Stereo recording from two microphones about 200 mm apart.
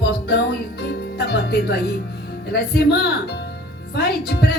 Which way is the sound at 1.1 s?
55° left (ahead or behind).